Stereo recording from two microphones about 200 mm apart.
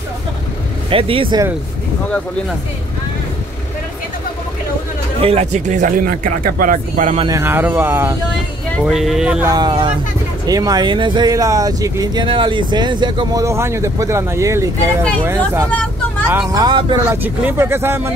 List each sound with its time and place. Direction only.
0.8 s speech: 25° right (ahead or behind)
5.2 s speech: 30° right (ahead or behind)
7.2 s speech: 15° right (ahead or behind)
8.8 s speech: centre (ahead or behind)
9.5 s speech: 20° right (ahead or behind)
15.7 s vehicle: 5° left (ahead or behind)
16.3 s speech: 15° right (ahead or behind)
17.2 s speech: 10° right (ahead or behind)